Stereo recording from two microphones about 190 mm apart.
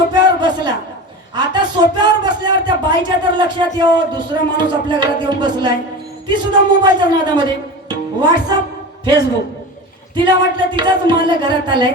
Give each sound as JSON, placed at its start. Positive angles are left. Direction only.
{"t": 0.1, "sound": "a sound", "side_deg": -25}
{"t": 1.4, "sound": "speech", "side_deg": -25}
{"t": 10.2, "sound": "speech", "side_deg": -25}